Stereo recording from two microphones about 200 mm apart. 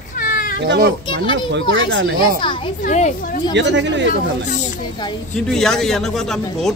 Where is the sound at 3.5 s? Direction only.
60° right (ahead or behind).